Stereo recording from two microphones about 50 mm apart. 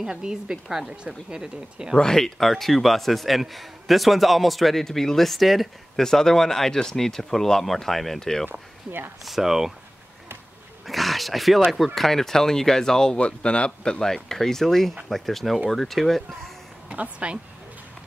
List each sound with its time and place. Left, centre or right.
0.0 s a woman's voice: centre
2.0 s a man's voice: centre
8.5 s speech: right
9.2 s a man's voice: centre
10.9 s a man's voice: centre
16.9 s a woman's voice: right